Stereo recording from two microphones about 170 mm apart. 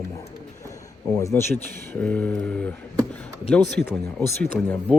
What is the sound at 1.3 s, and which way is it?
Speech, 10° left (ahead or behind).